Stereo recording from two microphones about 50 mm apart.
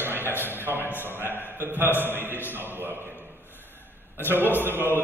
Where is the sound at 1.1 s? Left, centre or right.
Right.